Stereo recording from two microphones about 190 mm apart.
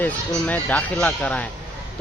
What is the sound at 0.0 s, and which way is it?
Speech, 10° left (ahead or behind).